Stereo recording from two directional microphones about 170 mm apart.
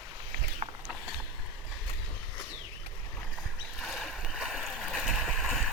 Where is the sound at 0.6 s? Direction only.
35° right (ahead or behind).